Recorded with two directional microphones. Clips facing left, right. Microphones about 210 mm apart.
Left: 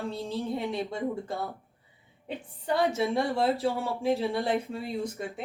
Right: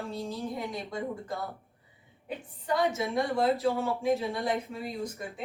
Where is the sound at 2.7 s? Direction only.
30° left (ahead or behind).